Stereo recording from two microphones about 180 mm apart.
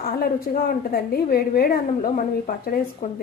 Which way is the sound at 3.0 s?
45° left (ahead or behind).